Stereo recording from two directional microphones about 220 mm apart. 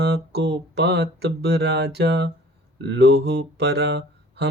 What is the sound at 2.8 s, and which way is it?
Mantra, 50° right (ahead or behind).